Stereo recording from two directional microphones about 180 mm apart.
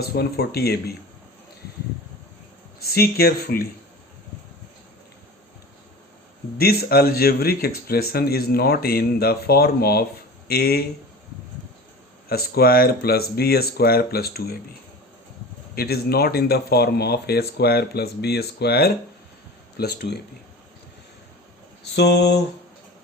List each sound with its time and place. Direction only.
0.1 s speech: 60° left (ahead or behind)
2.8 s speech: 60° left (ahead or behind)
6.6 s speech: 60° left (ahead or behind)
12.3 s speech: 60° left (ahead or behind)
15.7 s speech: 60° left (ahead or behind)
21.9 s a sound: 70° left (ahead or behind)